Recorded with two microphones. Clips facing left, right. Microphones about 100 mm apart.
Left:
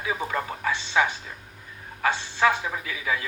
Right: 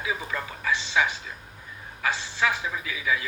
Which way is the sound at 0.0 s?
45° left (ahead or behind).